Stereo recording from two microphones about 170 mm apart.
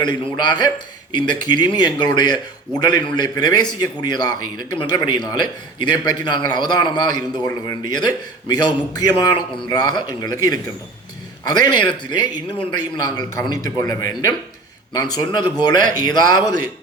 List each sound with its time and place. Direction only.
0.0 s a man's voice: 25° left (ahead or behind)